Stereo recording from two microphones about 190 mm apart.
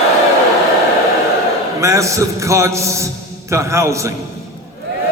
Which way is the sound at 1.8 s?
15° right (ahead or behind).